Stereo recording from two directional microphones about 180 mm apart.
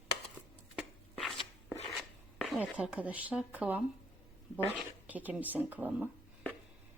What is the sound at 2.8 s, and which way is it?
A woman's voice, 5° right (ahead or behind).